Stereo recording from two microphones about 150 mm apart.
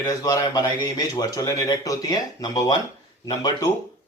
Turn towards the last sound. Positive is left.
turn(degrees=25)  # may be behind; listen again after turning